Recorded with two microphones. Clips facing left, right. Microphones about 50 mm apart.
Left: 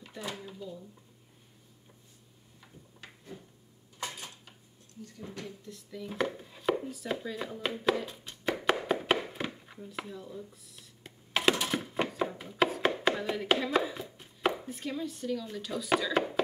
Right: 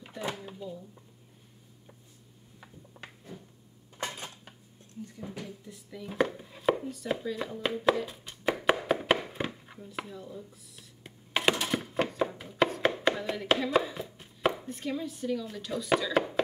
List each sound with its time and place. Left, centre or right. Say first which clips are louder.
4.0 s dishes: right 3 dB; right
5.0 s speech: right 1 dB; centre
8.8 s a sound: right 2 dB; centre
11.5 s chopping: right 1 dB; centre